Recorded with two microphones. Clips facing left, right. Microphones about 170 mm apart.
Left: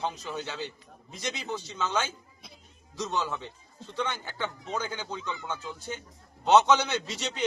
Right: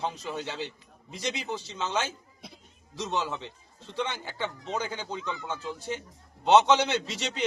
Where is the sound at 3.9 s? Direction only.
Centre (ahead or behind).